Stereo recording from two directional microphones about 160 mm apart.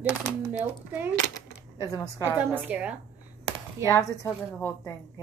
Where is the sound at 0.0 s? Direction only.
10° right (ahead or behind).